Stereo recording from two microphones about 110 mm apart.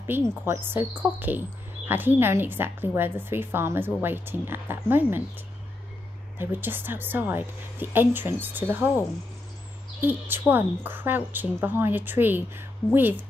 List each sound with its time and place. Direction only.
0.1 s a woman's voice: 20° right (ahead or behind)
6.3 s a woman's voice: 20° right (ahead or behind)
10.0 s a woman's voice: 15° right (ahead or behind)